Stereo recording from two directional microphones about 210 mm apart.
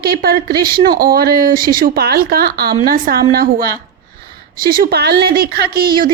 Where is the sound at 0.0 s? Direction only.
45° right (ahead or behind).